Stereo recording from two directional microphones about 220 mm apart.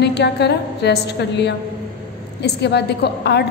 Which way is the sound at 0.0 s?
50° left (ahead or behind).